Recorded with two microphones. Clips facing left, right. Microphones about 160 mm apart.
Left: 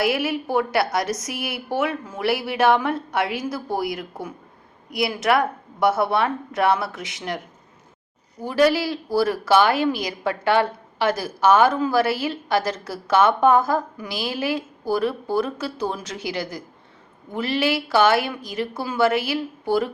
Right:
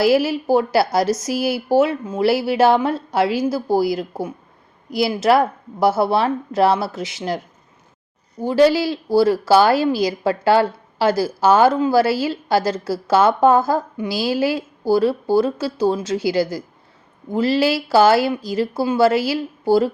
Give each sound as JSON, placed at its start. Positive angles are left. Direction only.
{"t": 0.0, "sound": "a woman's voice", "side_deg": -30}